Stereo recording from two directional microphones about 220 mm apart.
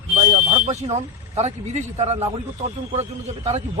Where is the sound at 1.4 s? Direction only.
30° right (ahead or behind).